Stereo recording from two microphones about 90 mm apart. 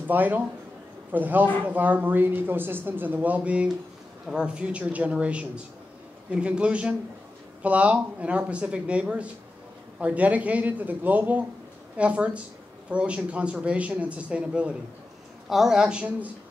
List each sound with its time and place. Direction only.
0.0 s a man's voice: 20° right (ahead or behind)